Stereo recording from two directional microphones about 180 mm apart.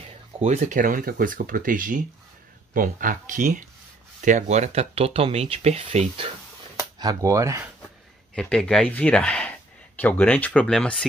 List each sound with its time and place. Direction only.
0.4 s speech: 40° right (ahead or behind)
7.0 s speech: 20° right (ahead or behind)
8.4 s speech: 5° left (ahead or behind)